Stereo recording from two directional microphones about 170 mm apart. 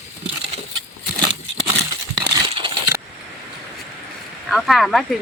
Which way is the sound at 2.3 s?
30° right (ahead or behind).